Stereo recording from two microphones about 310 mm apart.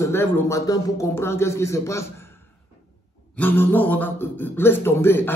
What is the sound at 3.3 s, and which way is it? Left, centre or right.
A man's voice, centre.